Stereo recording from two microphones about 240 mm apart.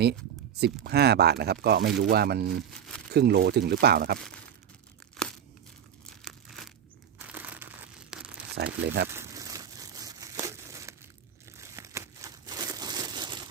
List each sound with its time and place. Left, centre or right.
0.0 s a sound: right
0.9 s speech: right
2.7 s speech: centre
3.1 s speech: right
6.2 s crumpling: centre
7.2 s crushing: centre
8.1 s crumpling: centre
8.5 s speech: right
9.1 s crumpling: centre